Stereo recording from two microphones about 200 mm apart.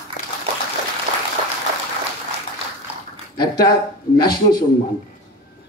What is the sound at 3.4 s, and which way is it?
A man's voice, 20° left (ahead or behind).